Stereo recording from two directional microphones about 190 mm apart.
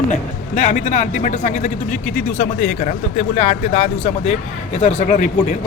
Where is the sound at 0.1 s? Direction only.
40° left (ahead or behind).